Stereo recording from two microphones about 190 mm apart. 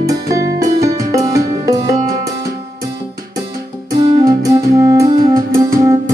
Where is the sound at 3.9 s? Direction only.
25° right (ahead or behind).